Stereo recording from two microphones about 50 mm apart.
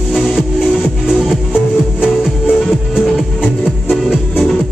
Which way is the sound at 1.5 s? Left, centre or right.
Right.